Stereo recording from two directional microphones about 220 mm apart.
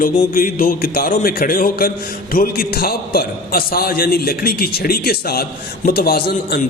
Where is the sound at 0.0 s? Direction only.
40° left (ahead or behind).